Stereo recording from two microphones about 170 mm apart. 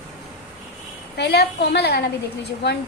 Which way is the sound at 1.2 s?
75° left (ahead or behind).